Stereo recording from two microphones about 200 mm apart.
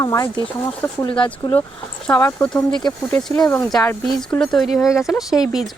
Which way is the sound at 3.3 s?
20° left (ahead or behind).